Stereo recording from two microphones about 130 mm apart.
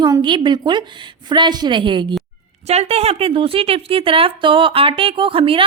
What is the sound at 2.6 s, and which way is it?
Speech, 55° right (ahead or behind).